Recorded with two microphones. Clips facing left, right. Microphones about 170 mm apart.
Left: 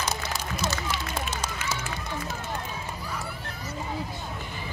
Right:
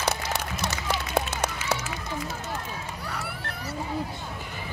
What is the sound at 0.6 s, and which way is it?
Run, 65° right (ahead or behind).